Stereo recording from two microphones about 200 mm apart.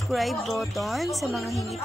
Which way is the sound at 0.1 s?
Centre (ahead or behind).